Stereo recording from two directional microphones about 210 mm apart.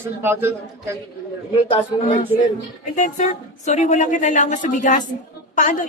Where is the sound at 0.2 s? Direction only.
10° right (ahead or behind).